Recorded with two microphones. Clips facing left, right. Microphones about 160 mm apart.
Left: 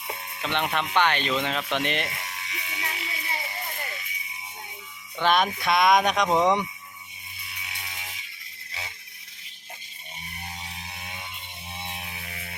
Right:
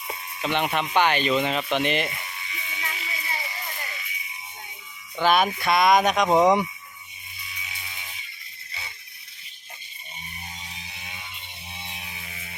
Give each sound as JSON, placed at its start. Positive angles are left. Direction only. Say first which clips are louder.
{"t": 0.4, "sound": "speech", "louder": "right 2 dB", "side_deg": -5}
{"t": 2.3, "sound": "music", "louder": "left 1 dB", "side_deg": 75}
{"t": 3.4, "sound": "music", "louder": "left 1 dB", "side_deg": 50}
{"t": 5.1, "sound": "speech", "louder": "right 2 dB", "side_deg": -5}
{"t": 7.5, "sound": "a sound", "louder": "left 1 dB", "side_deg": 65}